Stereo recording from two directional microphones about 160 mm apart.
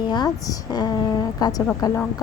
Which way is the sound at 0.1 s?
25° left (ahead or behind).